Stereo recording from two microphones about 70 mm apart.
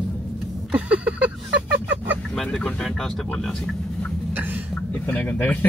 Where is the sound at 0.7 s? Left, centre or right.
Centre.